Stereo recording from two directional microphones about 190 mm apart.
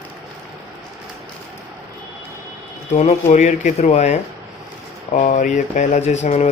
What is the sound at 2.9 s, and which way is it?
Speech, 40° left (ahead or behind).